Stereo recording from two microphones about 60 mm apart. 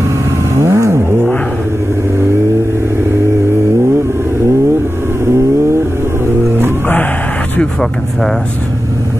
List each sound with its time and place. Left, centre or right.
0.6 s vehicle: right